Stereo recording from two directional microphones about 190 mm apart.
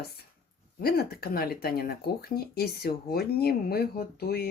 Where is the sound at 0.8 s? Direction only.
55° left (ahead or behind).